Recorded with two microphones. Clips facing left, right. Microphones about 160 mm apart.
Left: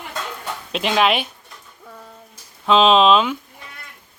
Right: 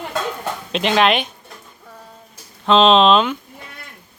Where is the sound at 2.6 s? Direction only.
5° left (ahead or behind).